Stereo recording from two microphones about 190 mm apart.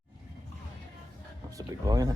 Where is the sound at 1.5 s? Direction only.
20° right (ahead or behind).